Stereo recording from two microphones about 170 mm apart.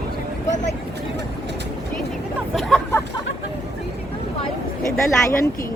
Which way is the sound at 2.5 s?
Centre (ahead or behind).